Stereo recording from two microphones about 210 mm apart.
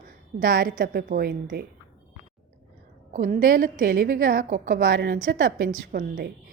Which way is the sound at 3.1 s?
40° right (ahead or behind).